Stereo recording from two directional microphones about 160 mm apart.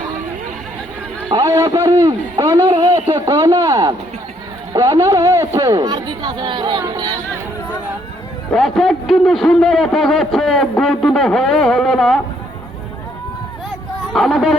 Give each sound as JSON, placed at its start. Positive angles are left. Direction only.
{"t": 1.3, "sound": "a man's voice", "side_deg": -25}
{"t": 8.5, "sound": "a man's voice", "side_deg": 0}
{"t": 14.1, "sound": "a man's voice", "side_deg": 0}